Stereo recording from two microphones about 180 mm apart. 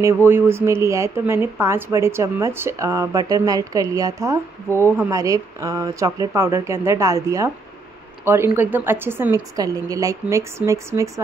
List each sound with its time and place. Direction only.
0.0 s a woman's voice: 10° right (ahead or behind)
8.5 s a woman's voice: 10° right (ahead or behind)